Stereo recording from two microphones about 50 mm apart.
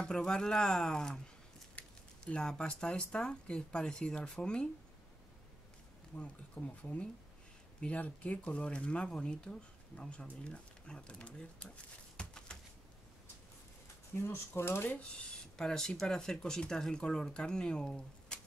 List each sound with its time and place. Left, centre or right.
0.0 s speech: centre
1.8 s a sound: left
2.4 s speech: centre
6.1 s speech: left
12.2 s a sound: centre
14.1 s speech: left
15.5 s speech: centre